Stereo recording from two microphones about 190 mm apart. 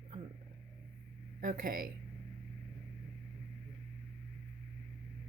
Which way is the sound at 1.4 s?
45° right (ahead or behind).